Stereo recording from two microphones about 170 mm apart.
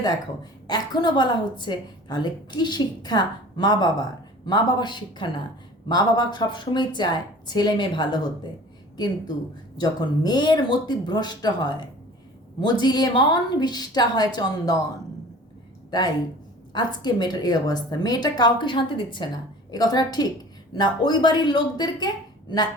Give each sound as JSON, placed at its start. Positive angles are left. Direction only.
{"t": 0.7, "sound": "a woman's voice", "side_deg": 25}
{"t": 9.7, "sound": "a woman's voice", "side_deg": 25}
{"t": 15.9, "sound": "a woman's voice", "side_deg": 25}